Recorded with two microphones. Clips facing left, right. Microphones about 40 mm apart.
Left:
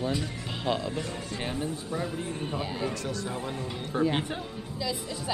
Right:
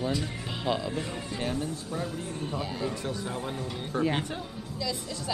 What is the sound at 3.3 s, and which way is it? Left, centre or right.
Speech, centre.